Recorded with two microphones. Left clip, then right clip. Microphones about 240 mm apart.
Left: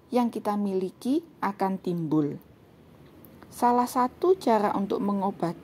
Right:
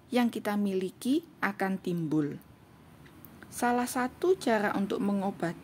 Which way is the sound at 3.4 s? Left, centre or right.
Centre.